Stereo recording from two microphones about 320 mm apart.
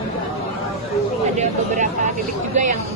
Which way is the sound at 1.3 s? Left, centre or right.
Right.